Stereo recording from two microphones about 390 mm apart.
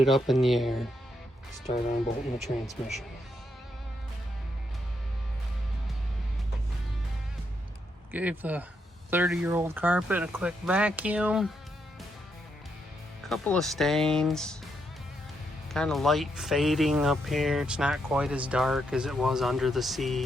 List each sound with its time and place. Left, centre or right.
0.0 s speech: centre
1.7 s speech: centre
2.6 s speech: centre
8.1 s speech: centre
13.2 s speech: centre
15.7 s speech: centre